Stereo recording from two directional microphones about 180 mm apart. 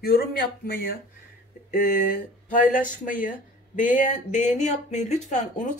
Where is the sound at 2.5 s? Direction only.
50° left (ahead or behind).